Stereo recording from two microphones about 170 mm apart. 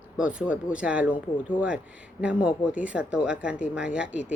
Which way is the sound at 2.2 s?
5° right (ahead or behind).